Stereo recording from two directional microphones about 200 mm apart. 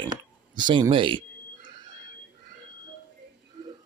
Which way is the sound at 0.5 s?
25° right (ahead or behind).